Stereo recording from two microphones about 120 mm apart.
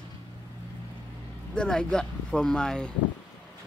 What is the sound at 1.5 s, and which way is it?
Speech, 5° left (ahead or behind).